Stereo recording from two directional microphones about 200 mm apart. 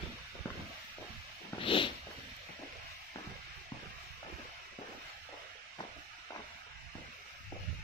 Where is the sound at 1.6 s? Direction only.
25° left (ahead or behind).